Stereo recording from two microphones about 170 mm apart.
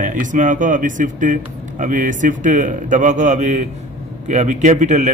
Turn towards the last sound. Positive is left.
turn(degrees=-45)  # may be behind; listen again after turning